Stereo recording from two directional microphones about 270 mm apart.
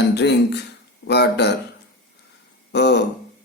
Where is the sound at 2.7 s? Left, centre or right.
Left.